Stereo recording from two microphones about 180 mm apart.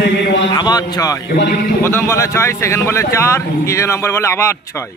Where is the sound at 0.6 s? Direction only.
20° left (ahead or behind).